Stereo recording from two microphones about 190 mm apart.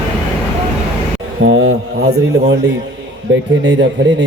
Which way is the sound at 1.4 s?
90° right.